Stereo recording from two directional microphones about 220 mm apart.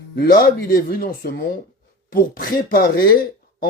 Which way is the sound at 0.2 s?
40° left (ahead or behind).